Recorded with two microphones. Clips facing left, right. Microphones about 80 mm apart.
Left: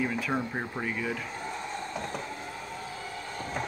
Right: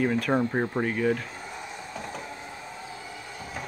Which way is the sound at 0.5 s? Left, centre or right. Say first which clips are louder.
Right 7 dB; right.